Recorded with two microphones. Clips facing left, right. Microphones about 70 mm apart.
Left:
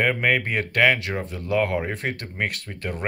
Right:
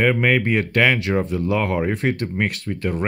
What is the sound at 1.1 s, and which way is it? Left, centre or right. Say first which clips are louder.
Speech: right 5 dB; right.